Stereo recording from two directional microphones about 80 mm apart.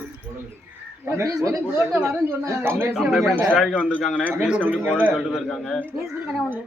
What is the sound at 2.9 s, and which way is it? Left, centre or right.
Speech, centre.